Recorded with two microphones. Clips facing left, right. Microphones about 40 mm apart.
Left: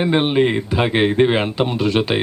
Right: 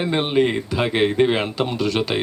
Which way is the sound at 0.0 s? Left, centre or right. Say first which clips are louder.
Left 3 dB; centre.